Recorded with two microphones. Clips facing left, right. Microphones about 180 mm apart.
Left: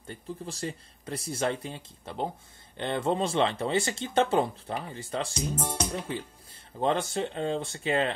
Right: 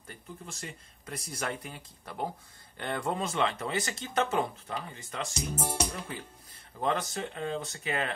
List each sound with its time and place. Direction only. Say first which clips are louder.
0.0 s speech: left 7 dB; 30° left (ahead or behind)
5.6 s speech: right 2 dB; 10° right (ahead or behind)
5.9 s speech: left 5 dB; 25° left (ahead or behind)